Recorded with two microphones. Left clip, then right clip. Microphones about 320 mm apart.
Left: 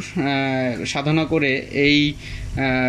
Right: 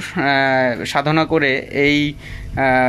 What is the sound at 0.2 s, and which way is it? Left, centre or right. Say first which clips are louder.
Speech: right 7 dB; right.